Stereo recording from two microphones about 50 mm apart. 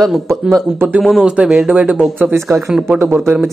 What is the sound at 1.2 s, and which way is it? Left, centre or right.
Speech, centre.